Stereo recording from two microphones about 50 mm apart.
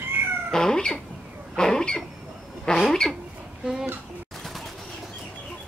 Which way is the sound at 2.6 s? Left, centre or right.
Centre.